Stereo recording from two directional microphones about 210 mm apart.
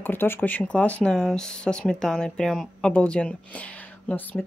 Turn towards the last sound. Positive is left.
turn(degrees=5)  # may be behind; listen again after turning